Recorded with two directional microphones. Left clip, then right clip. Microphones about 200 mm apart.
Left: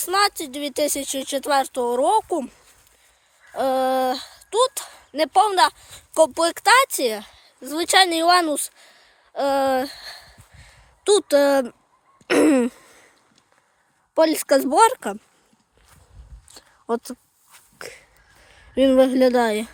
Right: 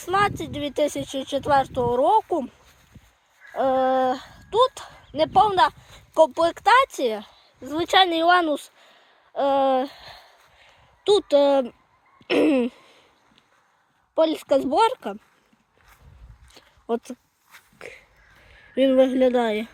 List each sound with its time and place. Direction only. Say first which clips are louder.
0.0 s speech: left 2 dB; centre (ahead or behind)
0.5 s speech: even; 5° right (ahead or behind); by 11.7 s 10° left (ahead or behind)
12.3 s a sound: left 3 dB; 20° left (ahead or behind)
14.2 s a woman's voice: left 3 dB; 20° left (ahead or behind)
16.5 s a sound: left 2 dB; 10° left (ahead or behind)
18.4 s speech: left 2 dB; 10° left (ahead or behind)